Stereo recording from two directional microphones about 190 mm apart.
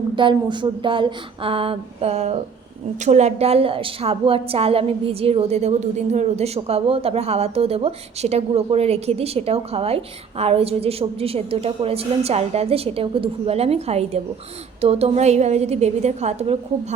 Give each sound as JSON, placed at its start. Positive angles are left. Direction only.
{"t": 0.2, "sound": "a woman's voice", "side_deg": -25}